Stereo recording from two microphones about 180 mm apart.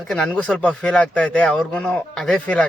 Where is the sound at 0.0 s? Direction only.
5° left (ahead or behind).